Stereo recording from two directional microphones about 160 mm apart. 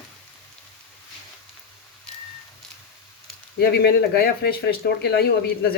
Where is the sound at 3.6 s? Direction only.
85° left.